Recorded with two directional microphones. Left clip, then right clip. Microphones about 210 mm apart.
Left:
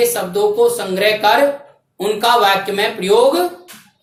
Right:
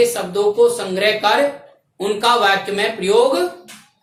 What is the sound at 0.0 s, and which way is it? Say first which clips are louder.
Speech: left 1 dB; 10° left (ahead or behind).